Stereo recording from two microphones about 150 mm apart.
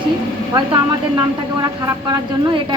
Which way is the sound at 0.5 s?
30° right (ahead or behind).